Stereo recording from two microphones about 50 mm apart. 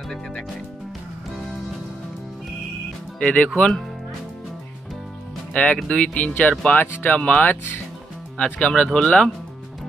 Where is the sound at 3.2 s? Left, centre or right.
Left.